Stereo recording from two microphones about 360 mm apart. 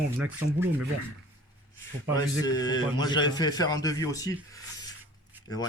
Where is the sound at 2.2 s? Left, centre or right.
Centre.